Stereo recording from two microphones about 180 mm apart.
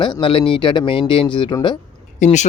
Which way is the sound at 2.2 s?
40° left (ahead or behind).